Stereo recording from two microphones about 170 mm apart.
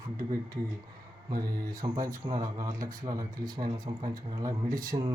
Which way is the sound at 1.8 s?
25° right (ahead or behind).